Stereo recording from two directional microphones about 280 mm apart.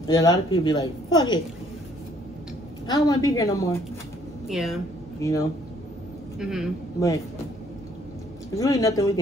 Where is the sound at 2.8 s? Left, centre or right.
Centre.